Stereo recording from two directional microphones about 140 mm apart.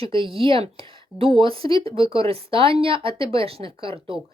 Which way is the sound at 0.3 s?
40° right (ahead or behind).